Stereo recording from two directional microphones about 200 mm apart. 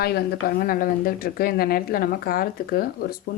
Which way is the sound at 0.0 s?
50° left (ahead or behind).